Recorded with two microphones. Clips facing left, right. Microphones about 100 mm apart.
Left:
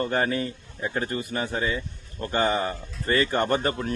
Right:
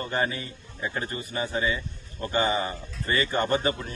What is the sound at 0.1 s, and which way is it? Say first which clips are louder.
Speech: left 3 dB; 55° left (ahead or behind).